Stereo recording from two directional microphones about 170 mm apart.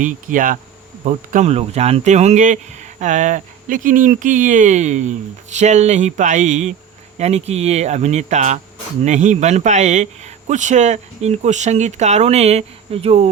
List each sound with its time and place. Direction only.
0.0 s speech: 50° right (ahead or behind)